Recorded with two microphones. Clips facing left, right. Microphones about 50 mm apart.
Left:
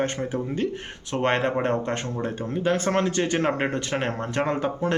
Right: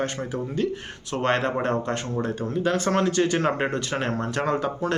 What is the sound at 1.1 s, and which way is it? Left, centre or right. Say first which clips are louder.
Speech: left 1 dB; left.